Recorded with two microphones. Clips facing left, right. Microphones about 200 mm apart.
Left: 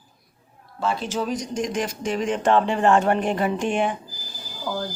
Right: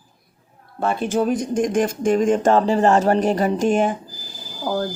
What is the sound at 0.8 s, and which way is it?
Speech, 55° right (ahead or behind).